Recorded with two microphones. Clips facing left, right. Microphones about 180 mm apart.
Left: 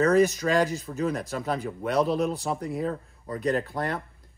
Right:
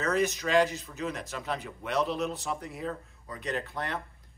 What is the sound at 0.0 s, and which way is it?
Speech, 40° left (ahead or behind).